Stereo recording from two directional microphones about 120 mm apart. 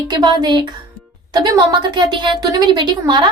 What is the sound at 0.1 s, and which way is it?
A woman's voice, 35° right (ahead or behind).